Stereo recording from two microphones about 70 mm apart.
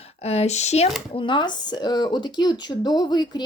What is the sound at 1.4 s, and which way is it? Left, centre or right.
Speech, left.